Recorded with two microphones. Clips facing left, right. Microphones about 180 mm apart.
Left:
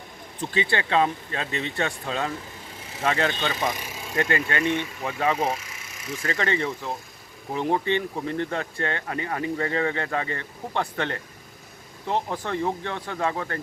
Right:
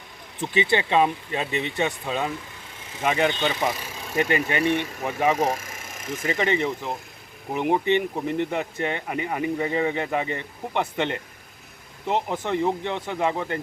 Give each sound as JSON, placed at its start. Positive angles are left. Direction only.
{"t": 0.3, "sound": "speech", "side_deg": -20}
{"t": 3.7, "sound": "speech", "side_deg": -5}
{"t": 4.3, "sound": "speech", "side_deg": -15}
{"t": 5.4, "sound": "a sound", "side_deg": -45}
{"t": 6.2, "sound": "speech", "side_deg": -20}